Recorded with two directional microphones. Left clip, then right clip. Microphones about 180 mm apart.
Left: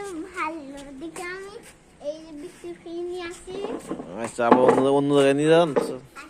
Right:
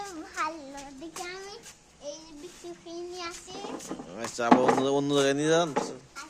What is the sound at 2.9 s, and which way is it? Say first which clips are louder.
Child singing: left 6 dB; 30° right (ahead or behind).